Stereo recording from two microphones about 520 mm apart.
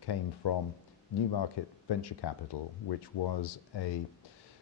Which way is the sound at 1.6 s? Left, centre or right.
Left.